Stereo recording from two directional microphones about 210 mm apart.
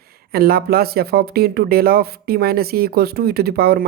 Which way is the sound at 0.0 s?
45° right (ahead or behind).